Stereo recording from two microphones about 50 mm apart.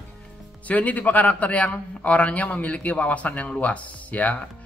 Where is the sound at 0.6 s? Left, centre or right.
Left.